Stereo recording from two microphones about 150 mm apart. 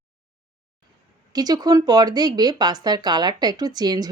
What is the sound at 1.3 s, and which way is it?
Speech, 25° right (ahead or behind).